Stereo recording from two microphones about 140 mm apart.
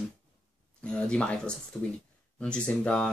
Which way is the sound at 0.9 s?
5° left (ahead or behind).